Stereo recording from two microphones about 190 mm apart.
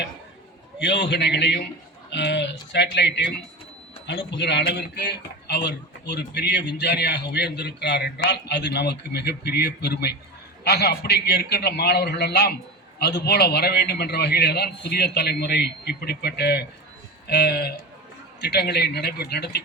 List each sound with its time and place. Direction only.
0.8 s a man's voice: 65° left (ahead or behind)